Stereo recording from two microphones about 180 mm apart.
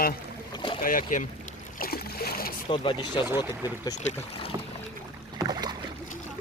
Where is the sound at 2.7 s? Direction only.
25° left (ahead or behind).